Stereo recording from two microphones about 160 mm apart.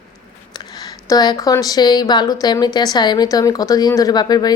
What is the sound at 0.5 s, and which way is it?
Speech, 25° left (ahead or behind).